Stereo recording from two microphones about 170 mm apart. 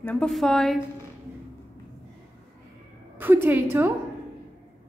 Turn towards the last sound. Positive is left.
turn(degrees=-10)  # may be behind; listen again after turning